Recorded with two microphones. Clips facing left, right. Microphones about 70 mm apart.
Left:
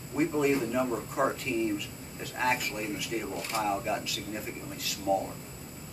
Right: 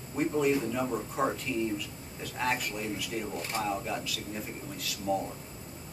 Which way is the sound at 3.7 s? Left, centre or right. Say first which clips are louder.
Left 2 dB; centre.